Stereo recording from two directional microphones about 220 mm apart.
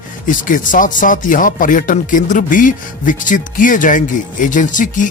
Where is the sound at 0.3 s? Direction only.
35° left (ahead or behind).